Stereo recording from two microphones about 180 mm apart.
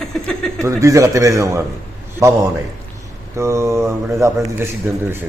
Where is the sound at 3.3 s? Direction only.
15° right (ahead or behind).